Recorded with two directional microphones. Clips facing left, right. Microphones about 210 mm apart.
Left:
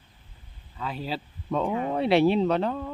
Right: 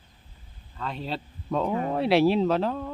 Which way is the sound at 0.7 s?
5° left (ahead or behind).